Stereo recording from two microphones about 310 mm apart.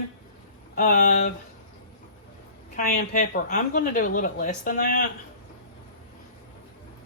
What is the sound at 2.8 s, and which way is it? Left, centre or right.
A woman's voice, left.